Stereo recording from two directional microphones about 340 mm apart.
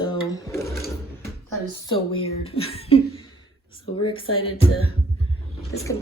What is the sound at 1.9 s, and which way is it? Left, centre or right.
Speech, centre.